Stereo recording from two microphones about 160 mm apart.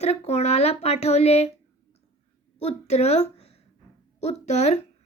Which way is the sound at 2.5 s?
40° left (ahead or behind).